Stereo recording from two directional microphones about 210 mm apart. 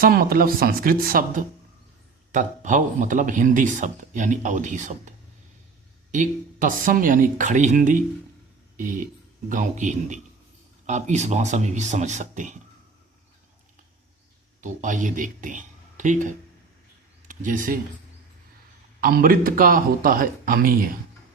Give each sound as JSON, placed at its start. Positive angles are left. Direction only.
{"t": 0.0, "sound": "speech", "side_deg": -45}
{"t": 14.6, "sound": "speech", "side_deg": -35}
{"t": 18.9, "sound": "speech", "side_deg": -45}